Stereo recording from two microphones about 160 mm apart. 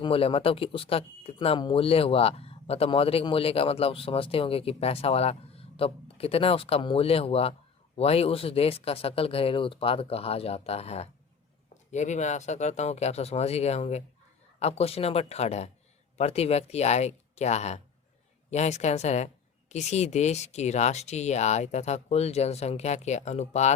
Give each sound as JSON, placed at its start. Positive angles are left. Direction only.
{"t": 0.0, "sound": "speech", "side_deg": 35}